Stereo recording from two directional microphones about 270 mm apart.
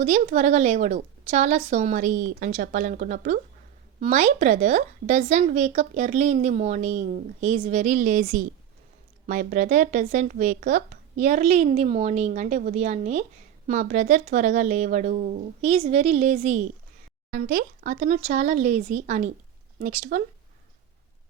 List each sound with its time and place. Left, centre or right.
0.0 s speech: right